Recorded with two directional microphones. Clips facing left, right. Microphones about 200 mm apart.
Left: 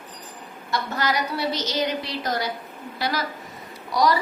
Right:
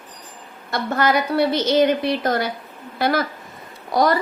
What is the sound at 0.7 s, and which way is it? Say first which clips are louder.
A woman's voice: right 6 dB; 55° right (ahead or behind).